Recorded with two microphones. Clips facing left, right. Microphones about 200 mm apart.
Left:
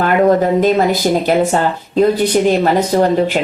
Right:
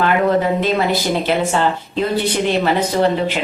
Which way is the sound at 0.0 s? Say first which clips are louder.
Left 4 dB; 45° left (ahead or behind).